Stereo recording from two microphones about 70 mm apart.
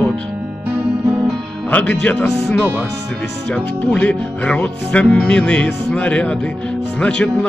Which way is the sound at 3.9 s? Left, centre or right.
Centre.